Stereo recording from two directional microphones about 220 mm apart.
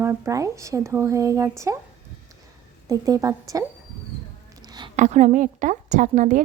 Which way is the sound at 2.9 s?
15° right (ahead or behind).